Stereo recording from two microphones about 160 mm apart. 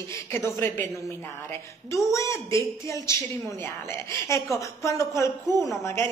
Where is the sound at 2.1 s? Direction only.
20° left (ahead or behind).